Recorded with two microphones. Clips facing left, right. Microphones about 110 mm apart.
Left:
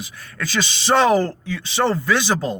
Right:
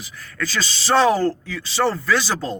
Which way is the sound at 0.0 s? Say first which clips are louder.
Right 1 dB; 20° left (ahead or behind).